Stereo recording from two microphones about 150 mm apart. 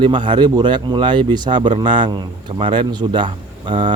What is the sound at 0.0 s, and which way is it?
A man's voice, 30° right (ahead or behind).